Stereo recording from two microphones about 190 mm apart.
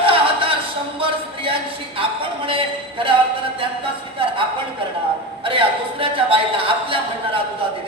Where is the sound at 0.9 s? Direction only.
30° right (ahead or behind).